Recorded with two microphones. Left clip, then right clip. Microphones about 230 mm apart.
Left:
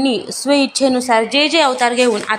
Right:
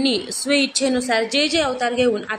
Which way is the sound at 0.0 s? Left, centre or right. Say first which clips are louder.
Left 3 dB; centre.